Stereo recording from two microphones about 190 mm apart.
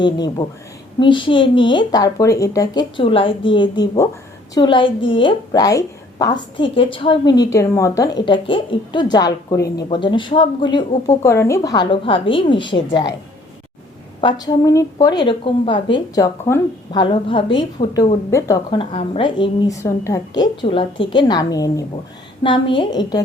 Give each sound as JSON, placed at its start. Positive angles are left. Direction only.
{"t": 0.0, "sound": "a woman's voice", "side_deg": 25}
{"t": 14.2, "sound": "a woman's voice", "side_deg": 25}
{"t": 17.0, "sound": "a woman's voice", "side_deg": 25}